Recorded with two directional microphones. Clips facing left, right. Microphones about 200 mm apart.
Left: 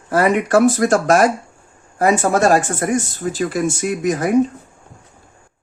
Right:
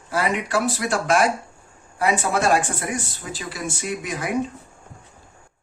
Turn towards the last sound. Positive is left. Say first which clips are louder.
# left 9 dB
turn(degrees=45)  # may be behind; listen again after turning